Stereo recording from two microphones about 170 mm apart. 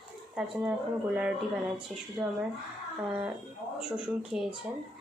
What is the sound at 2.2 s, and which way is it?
Speech, 5° right (ahead or behind).